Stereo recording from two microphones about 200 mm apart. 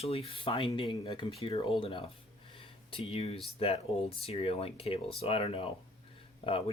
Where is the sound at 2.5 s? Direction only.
25° left (ahead or behind).